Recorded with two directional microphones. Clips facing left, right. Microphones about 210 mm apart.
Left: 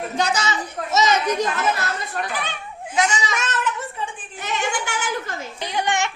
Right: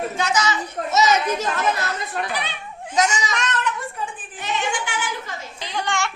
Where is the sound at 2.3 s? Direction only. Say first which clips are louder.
Even; 50° left (ahead or behind).